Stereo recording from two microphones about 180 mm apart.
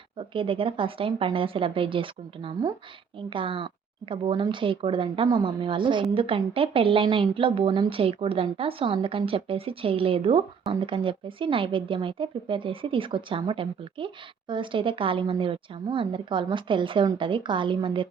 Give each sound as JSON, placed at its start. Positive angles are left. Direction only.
{"t": 0.2, "sound": "a woman's voice", "side_deg": -30}